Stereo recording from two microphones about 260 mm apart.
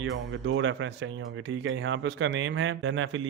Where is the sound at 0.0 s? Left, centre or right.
Right.